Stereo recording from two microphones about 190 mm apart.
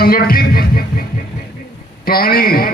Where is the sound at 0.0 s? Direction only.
50° left (ahead or behind).